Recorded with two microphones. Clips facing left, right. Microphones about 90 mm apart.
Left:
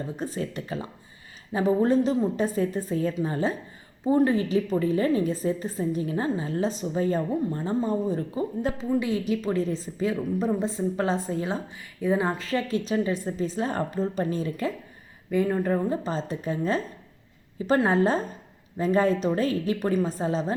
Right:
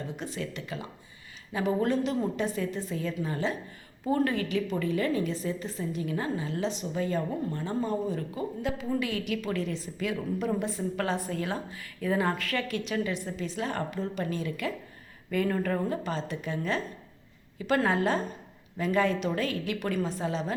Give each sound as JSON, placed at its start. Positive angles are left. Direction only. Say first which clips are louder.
{"t": 0.2, "sound": "a woman's voice", "louder": "left 5 dB", "side_deg": 35}
{"t": 8.7, "sound": "a woman's voice", "louder": "left 3 dB", "side_deg": 40}
{"t": 9.0, "sound": "a woman's voice", "louder": "left 5 dB", "side_deg": 25}
{"t": 15.3, "sound": "a woman's voice", "louder": "left 4 dB", "side_deg": 20}